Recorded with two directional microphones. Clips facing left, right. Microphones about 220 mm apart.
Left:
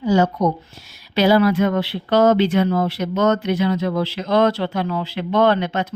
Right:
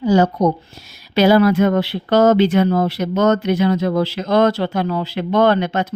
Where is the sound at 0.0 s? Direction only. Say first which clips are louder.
Right 3 dB; 35° right (ahead or behind).